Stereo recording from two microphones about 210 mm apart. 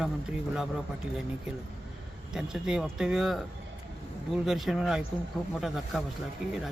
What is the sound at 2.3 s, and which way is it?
Speech, 5° right (ahead or behind).